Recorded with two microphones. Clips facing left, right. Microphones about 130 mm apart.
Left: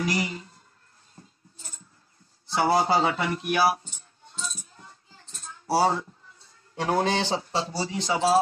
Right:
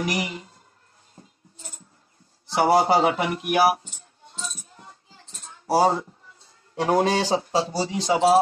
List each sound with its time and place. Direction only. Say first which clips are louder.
0.0 s speech: right 1 dB; 20° right (ahead or behind)
2.4 s speech: right 4 dB; 20° right (ahead or behind)
4.7 s a sound: right 3 dB; 30° right (ahead or behind)
5.7 s a man's voice: right 3 dB; 20° right (ahead or behind)